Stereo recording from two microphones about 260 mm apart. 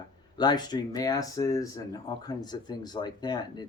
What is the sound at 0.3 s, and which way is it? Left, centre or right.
Speech, centre.